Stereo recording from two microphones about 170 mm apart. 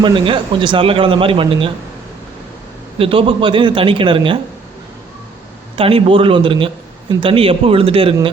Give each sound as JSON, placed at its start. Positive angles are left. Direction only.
{"t": 0.0, "sound": "a man's voice", "side_deg": -30}
{"t": 3.0, "sound": "a man's voice", "side_deg": -30}
{"t": 5.7, "sound": "a man's voice", "side_deg": -30}